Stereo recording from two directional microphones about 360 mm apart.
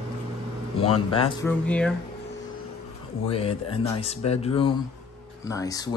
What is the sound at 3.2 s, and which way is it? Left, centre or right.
Speech, centre.